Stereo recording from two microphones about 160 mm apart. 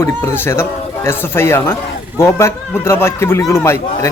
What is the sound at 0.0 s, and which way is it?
A man's voice, 15° left (ahead or behind).